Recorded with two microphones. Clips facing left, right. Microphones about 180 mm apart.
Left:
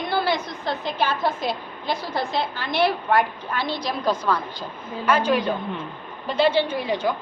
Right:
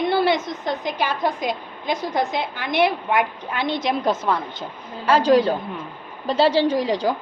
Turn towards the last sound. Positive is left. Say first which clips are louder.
# right 4 dB
turn(degrees=-35)  # may be behind; listen again after turning